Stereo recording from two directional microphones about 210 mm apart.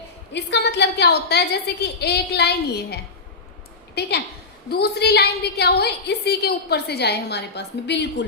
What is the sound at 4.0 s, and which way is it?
A woman's voice, 50° left (ahead or behind).